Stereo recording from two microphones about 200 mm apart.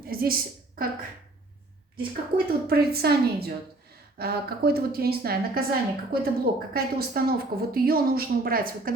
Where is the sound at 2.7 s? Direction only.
50° right (ahead or behind).